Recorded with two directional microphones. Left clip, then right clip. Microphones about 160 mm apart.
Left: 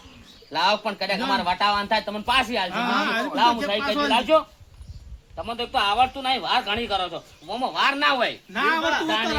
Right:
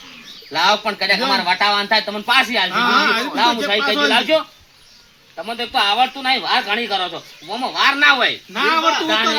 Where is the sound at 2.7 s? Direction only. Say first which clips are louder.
Right 8 dB; 30° left (ahead or behind).